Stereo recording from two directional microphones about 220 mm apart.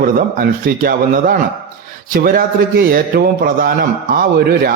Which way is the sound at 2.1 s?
40° right (ahead or behind).